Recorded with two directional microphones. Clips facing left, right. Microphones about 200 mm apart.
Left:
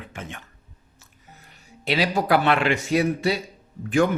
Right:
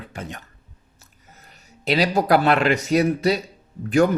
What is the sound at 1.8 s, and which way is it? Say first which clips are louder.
Speech: right 3 dB; 40° right (ahead or behind).